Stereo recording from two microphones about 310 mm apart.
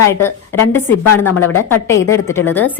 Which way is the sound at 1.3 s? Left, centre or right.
Left.